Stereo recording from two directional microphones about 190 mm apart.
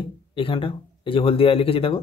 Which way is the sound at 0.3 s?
25° left (ahead or behind).